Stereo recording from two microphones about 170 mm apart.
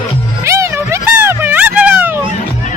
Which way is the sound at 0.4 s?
15° right (ahead or behind).